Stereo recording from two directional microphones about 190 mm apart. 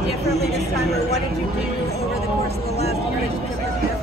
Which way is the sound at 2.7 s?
35° left (ahead or behind).